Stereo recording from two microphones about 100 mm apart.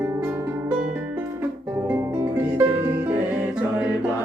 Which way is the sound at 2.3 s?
20° right (ahead or behind).